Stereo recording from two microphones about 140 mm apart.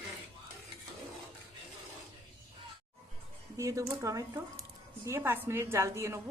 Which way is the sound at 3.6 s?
20° right (ahead or behind).